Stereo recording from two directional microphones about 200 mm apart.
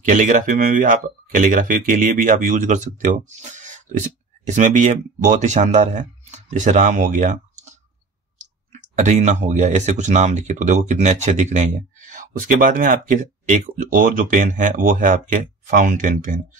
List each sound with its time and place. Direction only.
0.0 s speech: 40° right (ahead or behind)